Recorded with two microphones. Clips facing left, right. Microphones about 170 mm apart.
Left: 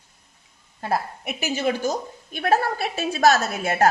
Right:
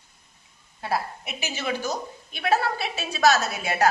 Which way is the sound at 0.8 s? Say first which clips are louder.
Left 2 dB; 50° left (ahead or behind).